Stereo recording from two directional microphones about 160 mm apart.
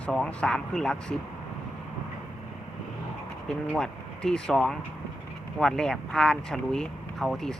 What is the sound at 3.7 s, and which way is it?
Speech, 5° left (ahead or behind).